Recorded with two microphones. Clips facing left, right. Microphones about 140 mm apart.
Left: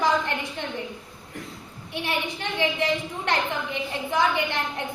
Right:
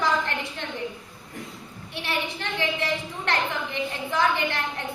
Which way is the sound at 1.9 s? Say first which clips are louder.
Left 1 dB; 15° left (ahead or behind).